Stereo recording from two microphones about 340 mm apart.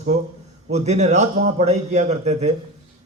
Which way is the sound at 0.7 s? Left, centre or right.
Centre.